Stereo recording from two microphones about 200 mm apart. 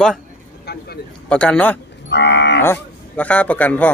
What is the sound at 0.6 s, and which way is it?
Vehicle, 55° left (ahead or behind).